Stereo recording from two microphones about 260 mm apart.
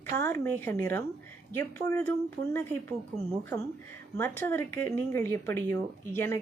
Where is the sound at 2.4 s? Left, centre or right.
Centre.